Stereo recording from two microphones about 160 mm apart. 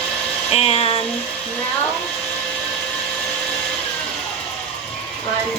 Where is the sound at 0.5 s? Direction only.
40° left (ahead or behind).